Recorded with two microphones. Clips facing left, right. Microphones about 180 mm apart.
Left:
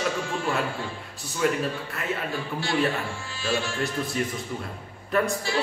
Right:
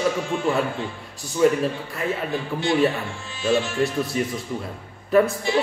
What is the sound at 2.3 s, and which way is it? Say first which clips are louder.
Speech: right 5 dB; 20° right (ahead or behind).